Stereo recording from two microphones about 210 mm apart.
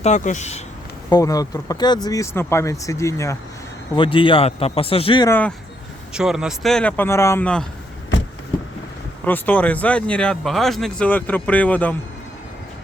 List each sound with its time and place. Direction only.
0.0 s speech: 35° left (ahead or behind)
1.1 s speech: 15° left (ahead or behind)
5.3 s speech: 5° left (ahead or behind)
6.1 s speech: 5° right (ahead or behind)
9.2 s speech: 10° left (ahead or behind)